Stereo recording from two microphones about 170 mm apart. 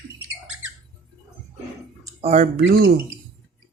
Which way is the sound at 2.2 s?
45° right (ahead or behind).